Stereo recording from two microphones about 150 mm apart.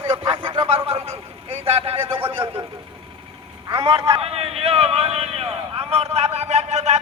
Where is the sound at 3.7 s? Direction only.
35° right (ahead or behind).